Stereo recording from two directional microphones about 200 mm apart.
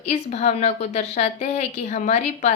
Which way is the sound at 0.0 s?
35° left (ahead or behind).